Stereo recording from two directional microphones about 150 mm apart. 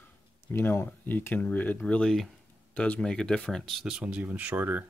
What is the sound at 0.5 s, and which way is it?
Speech, 15° left (ahead or behind).